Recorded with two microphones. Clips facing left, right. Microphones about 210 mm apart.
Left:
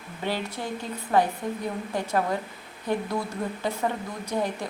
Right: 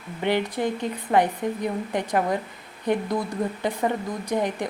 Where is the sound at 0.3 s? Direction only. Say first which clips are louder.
Right 7 dB; 20° right (ahead or behind).